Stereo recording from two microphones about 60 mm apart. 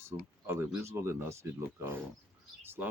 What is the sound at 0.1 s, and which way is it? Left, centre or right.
Speech, right.